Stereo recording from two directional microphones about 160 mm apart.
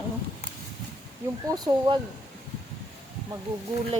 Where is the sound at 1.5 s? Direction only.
25° right (ahead or behind).